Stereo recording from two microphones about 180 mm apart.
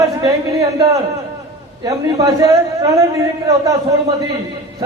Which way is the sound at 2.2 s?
20° right (ahead or behind).